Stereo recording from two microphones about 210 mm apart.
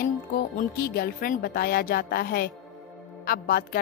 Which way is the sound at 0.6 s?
45° left (ahead or behind).